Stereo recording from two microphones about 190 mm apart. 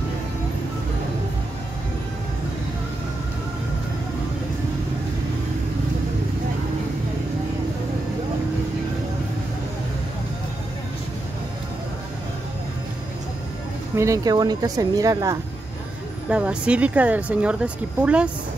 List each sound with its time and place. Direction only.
13.9 s speech: 15° right (ahead or behind)
16.3 s speech: 5° right (ahead or behind)